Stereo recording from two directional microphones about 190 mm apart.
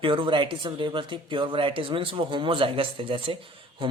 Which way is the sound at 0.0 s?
25° right (ahead or behind).